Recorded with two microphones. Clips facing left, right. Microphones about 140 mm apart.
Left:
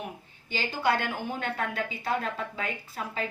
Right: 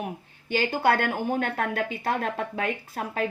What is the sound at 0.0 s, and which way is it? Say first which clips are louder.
A woman's voice: right 5 dB; 55° right (ahead or behind).